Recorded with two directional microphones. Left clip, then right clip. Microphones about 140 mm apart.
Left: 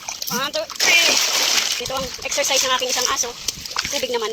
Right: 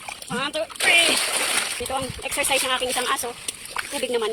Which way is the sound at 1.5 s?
10° left (ahead or behind).